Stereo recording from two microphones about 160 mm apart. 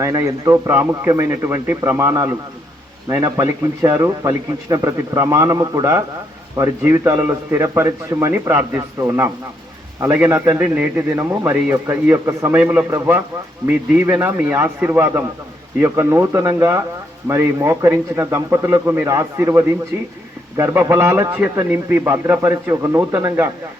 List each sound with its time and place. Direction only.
0.0 s a man's voice: 20° right (ahead or behind)